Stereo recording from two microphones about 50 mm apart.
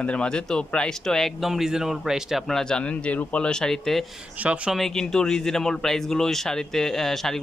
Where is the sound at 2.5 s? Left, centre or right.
Centre.